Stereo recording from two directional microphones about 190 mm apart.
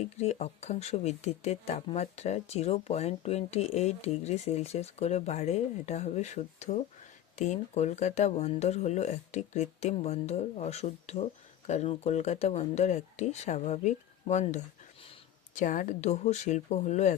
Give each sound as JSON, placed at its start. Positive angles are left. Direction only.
{"t": 0.0, "sound": "speech", "side_deg": 35}